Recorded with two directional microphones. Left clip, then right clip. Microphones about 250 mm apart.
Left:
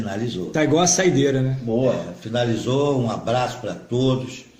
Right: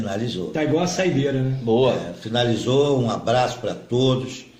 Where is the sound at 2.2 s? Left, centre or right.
Centre.